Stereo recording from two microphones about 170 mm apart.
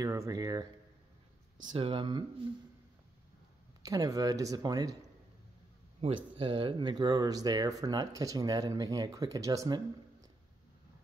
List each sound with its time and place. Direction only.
0.0 s speech: 20° right (ahead or behind)
1.7 s speech: 30° right (ahead or behind)
3.8 s speech: 20° right (ahead or behind)
5.9 s speech: 35° right (ahead or behind); by 9.8 s 20° right (ahead or behind)